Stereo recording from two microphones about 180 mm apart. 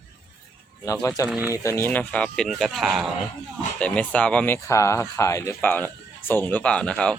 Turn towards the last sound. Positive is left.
turn(degrees=5)  # may be behind; listen again after turning